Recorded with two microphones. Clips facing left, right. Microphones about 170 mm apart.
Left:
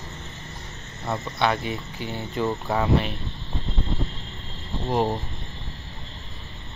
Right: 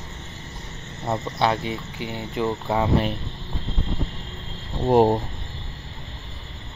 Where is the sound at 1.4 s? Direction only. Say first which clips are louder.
Right 1 dB; 25° right (ahead or behind).